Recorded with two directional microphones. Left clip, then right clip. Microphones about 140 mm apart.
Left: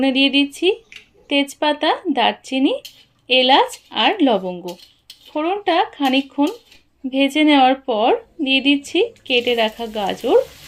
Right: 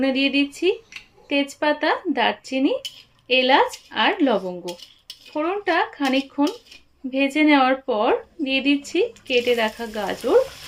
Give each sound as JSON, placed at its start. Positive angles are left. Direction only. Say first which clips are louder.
{"t": 0.0, "sound": "speech", "louder": "left 4 dB", "side_deg": 25}